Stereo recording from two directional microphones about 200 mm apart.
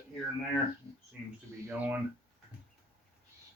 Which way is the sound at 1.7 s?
10° right (ahead or behind).